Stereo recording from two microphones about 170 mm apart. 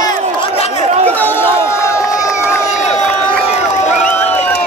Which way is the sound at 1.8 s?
20° left (ahead or behind).